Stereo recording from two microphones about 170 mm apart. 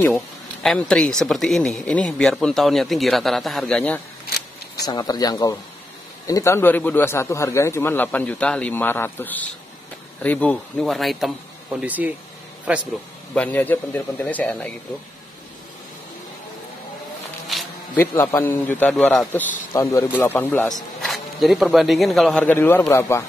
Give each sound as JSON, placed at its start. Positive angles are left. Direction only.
{"t": 0.0, "sound": "speech", "side_deg": 0}
{"t": 4.8, "sound": "a man's voice", "side_deg": 25}
{"t": 13.3, "sound": "a man's voice", "side_deg": 10}
{"t": 17.9, "sound": "a man's voice", "side_deg": 15}
{"t": 21.0, "sound": "speech", "side_deg": 0}